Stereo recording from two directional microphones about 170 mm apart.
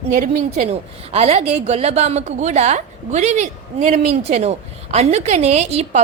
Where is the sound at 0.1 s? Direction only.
50° right (ahead or behind).